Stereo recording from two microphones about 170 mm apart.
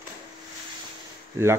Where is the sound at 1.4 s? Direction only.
15° right (ahead or behind).